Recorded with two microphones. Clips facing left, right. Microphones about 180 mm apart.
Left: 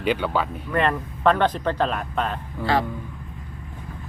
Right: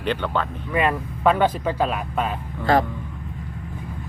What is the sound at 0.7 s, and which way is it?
Speech, 10° right (ahead or behind).